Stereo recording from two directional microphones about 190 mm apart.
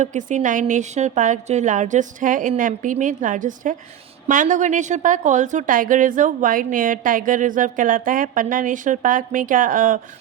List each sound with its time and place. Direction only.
0.0 s a woman's voice: 40° right (ahead or behind)